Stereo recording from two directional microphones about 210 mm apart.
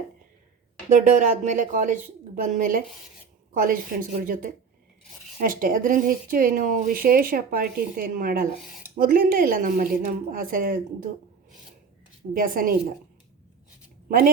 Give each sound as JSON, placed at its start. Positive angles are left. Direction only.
{"t": 0.9, "sound": "a woman's voice", "side_deg": -35}
{"t": 12.3, "sound": "a woman's voice", "side_deg": -40}